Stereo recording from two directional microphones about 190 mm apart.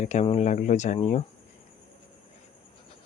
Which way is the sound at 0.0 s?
35° left (ahead or behind).